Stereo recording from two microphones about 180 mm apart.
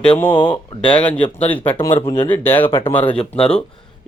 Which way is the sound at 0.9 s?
5° left (ahead or behind).